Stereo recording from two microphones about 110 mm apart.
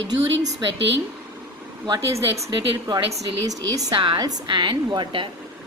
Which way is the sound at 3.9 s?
50° right (ahead or behind).